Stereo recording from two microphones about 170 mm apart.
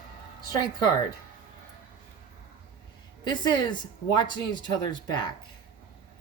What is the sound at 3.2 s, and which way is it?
Speech, 25° left (ahead or behind).